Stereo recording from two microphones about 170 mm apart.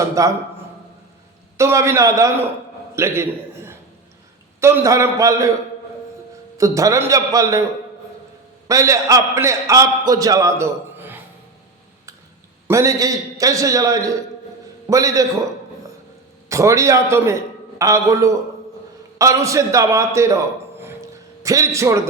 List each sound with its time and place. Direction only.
0.2 s a man's voice: 20° right (ahead or behind)
1.5 s a man's voice: 15° right (ahead or behind)
2.9 s a sound: 15° right (ahead or behind)
4.6 s a man's voice: 15° right (ahead or behind)
6.6 s a man's voice: 20° right (ahead or behind)
8.6 s a man's voice: 20° right (ahead or behind)
12.6 s a man's voice: 15° right (ahead or behind)
16.5 s a man's voice: 20° right (ahead or behind)